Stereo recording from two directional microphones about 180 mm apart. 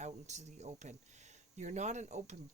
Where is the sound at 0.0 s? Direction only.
40° right (ahead or behind).